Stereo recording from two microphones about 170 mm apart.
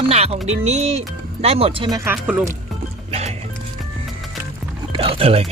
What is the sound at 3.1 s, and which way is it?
Music, 40° right (ahead or behind).